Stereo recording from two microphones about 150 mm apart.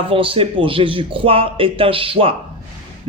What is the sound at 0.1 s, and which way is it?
Speech, 35° right (ahead or behind).